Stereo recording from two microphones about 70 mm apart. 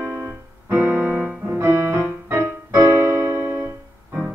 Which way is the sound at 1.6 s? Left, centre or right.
Right.